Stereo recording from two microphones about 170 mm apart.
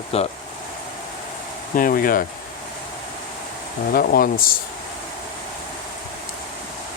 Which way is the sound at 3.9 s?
60° left (ahead or behind).